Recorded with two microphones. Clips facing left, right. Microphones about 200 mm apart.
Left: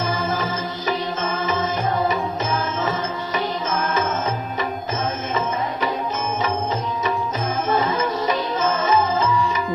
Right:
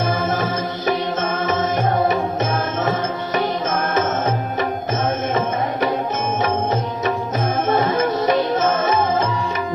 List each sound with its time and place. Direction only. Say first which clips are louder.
0.2 s music: right 3 dB; 55° right (ahead or behind)
3.3 s music: right 3 dB; 55° right (ahead or behind)
7.7 s music: right 3 dB; 55° right (ahead or behind)